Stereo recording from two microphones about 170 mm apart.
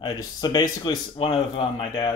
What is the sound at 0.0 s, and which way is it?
A man's voice, 25° left (ahead or behind).